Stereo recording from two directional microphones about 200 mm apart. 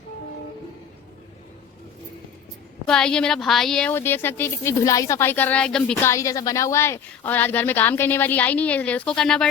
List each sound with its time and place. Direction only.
2.8 s a woman's voice: 5° left (ahead or behind)
6.1 s a woman's voice: 15° left (ahead or behind)